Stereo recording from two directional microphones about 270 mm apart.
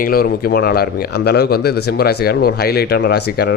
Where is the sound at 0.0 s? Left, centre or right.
Left.